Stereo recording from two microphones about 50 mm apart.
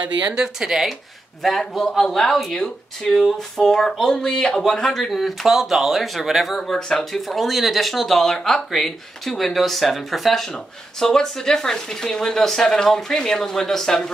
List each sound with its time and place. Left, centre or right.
0.2 s speech: centre
1.4 s speech: centre
7.1 s speech: centre